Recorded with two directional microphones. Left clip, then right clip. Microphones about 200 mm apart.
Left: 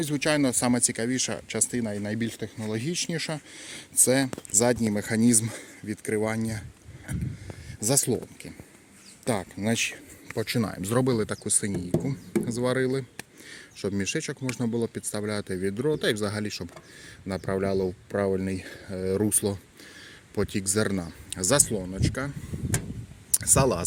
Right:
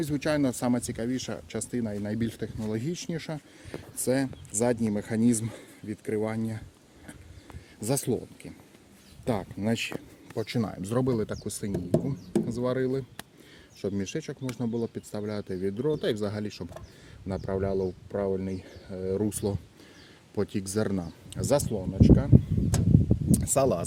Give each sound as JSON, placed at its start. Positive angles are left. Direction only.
{"t": 0.0, "sound": "speech", "side_deg": 0}
{"t": 19.3, "sound": "speech", "side_deg": 5}
{"t": 23.3, "sound": "speech", "side_deg": 5}